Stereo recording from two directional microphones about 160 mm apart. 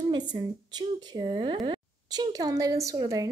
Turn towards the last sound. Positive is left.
turn(degrees=-20)  # may be behind; listen again after turning